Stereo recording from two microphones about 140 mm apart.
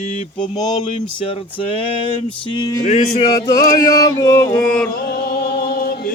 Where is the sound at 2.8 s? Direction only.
60° left (ahead or behind).